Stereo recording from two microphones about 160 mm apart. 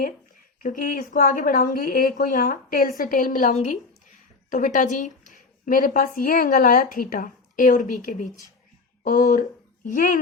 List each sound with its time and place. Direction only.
0.6 s a woman's voice: 55° left (ahead or behind)